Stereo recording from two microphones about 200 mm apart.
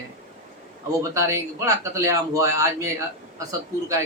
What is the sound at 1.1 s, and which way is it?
Speech, 15° right (ahead or behind).